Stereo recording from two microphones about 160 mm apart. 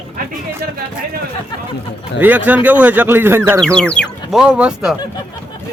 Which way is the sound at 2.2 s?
10° right (ahead or behind).